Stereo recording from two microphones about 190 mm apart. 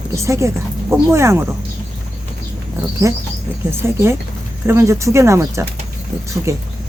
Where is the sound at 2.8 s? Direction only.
15° right (ahead or behind).